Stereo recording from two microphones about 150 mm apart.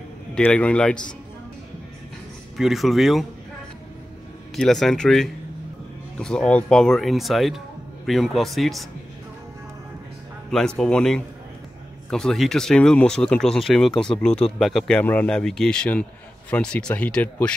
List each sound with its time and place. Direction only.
0.3 s a man's voice: 10° left (ahead or behind)
2.5 s speech: centre (ahead or behind)
4.6 s speech: 5° left (ahead or behind)
10.8 s speech: 5° left (ahead or behind)